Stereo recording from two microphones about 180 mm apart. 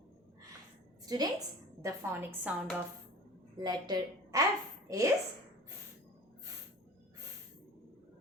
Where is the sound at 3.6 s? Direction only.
25° right (ahead or behind).